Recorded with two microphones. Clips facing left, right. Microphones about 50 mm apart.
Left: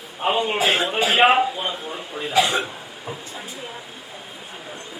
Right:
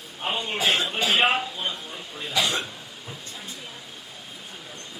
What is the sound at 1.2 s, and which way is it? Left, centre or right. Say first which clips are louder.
Speech: left 9 dB; centre.